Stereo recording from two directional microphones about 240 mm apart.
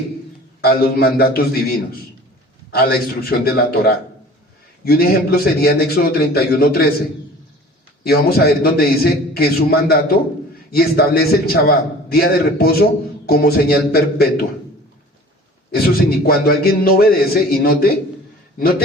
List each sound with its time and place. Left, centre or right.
0.6 s a man's voice: left
8.0 s a man's voice: left
15.7 s a man's voice: left